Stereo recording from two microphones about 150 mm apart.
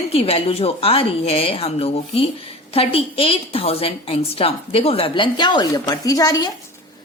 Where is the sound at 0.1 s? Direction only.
40° left (ahead or behind).